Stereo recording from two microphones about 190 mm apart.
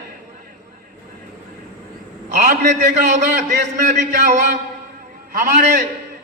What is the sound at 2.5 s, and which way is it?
Speech, 40° right (ahead or behind).